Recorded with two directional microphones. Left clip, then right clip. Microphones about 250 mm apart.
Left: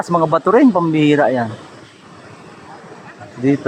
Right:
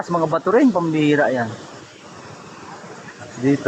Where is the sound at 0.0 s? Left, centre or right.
Left.